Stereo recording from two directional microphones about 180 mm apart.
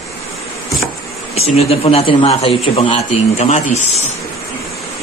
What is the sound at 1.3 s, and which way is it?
A man's voice, 35° left (ahead or behind).